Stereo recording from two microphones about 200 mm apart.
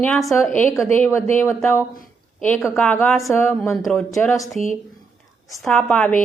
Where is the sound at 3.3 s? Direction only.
10° left (ahead or behind).